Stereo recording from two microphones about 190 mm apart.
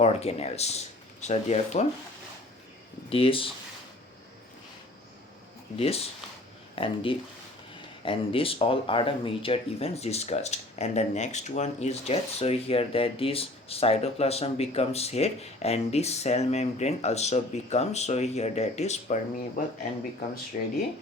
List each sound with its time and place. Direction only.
0.0 s speech: 35° left (ahead or behind)
3.1 s speech: 30° left (ahead or behind)
5.7 s speech: 30° left (ahead or behind)
20.5 s speech: 45° left (ahead or behind)